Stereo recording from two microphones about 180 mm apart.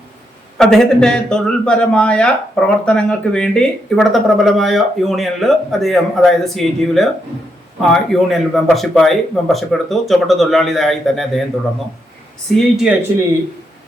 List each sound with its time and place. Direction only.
0.6 s speech: centre (ahead or behind)
12.5 s speech: 5° right (ahead or behind)